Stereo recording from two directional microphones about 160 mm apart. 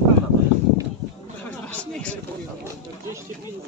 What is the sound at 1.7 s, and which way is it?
Speech, 5° left (ahead or behind).